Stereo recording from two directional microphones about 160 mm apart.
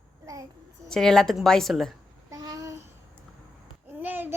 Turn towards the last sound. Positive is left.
turn(degrees=-10)  # may be behind; listen again after turning